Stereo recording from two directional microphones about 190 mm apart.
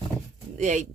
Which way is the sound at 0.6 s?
40° right (ahead or behind).